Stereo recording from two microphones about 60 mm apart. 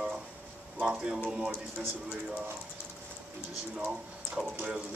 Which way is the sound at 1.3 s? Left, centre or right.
Centre.